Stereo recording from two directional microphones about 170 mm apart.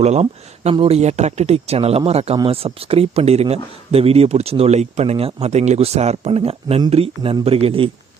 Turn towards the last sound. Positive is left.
turn(degrees=-35)  # may be behind; listen again after turning